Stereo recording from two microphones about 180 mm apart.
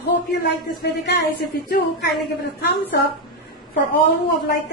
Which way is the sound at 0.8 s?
60° left (ahead or behind).